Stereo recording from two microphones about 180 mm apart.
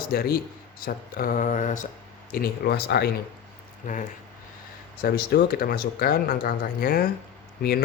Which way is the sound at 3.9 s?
45° left (ahead or behind).